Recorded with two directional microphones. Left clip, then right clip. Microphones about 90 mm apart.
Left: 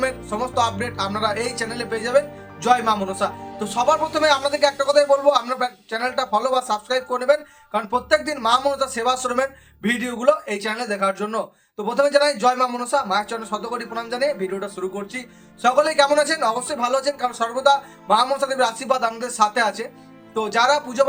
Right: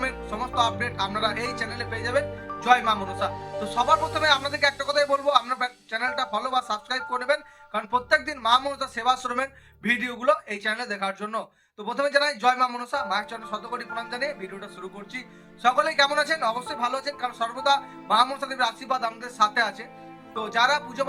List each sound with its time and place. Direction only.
0.0 s speech: 45° left (ahead or behind)